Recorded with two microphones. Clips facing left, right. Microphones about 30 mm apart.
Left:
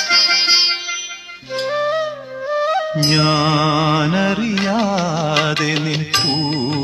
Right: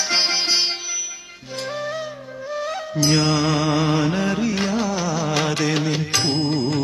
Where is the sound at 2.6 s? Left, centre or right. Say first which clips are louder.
Left 6 dB; left.